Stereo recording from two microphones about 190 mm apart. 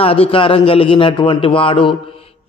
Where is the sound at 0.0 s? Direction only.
30° left (ahead or behind).